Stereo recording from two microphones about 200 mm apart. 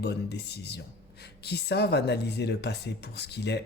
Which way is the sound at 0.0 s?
55° left (ahead or behind).